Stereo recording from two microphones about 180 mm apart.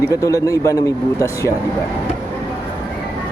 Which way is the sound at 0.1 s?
20° left (ahead or behind).